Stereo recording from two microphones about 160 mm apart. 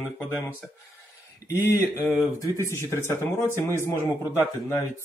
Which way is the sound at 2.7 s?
15° left (ahead or behind).